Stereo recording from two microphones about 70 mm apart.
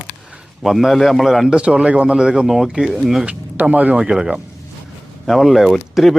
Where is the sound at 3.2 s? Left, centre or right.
Right.